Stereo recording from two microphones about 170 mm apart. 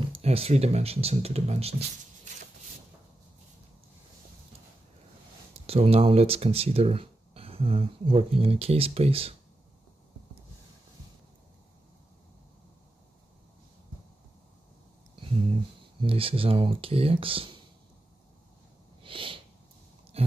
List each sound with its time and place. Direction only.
0.1 s speech: 35° right (ahead or behind)
5.7 s speech: 35° right (ahead or behind)
16.0 s speech: 30° right (ahead or behind)
19.0 s a sound: 30° right (ahead or behind)